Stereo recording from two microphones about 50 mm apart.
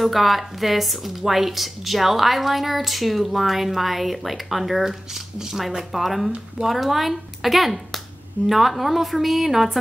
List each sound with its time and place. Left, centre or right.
0.0 s a woman's voice: centre